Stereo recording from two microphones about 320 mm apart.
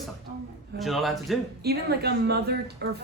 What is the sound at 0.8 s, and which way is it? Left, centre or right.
Speech, centre.